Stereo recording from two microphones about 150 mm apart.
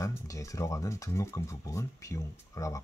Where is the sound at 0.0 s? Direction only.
20° left (ahead or behind).